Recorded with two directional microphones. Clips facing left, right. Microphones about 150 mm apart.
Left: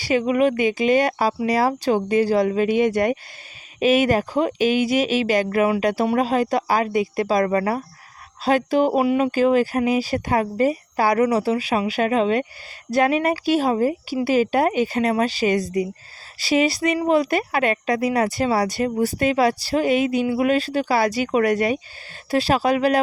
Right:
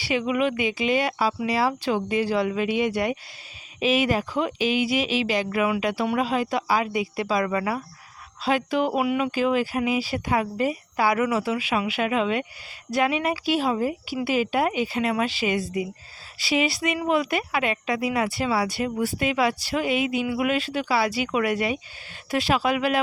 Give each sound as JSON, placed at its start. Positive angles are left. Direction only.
{"t": 0.0, "sound": "speech", "side_deg": 40}